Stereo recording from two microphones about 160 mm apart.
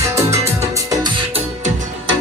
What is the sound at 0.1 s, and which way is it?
Music, 15° right (ahead or behind).